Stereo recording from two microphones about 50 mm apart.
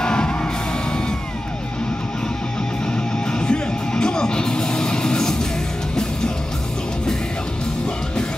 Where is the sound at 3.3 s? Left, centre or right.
Centre.